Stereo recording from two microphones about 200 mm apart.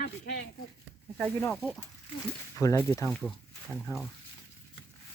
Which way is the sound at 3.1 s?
5° left (ahead or behind).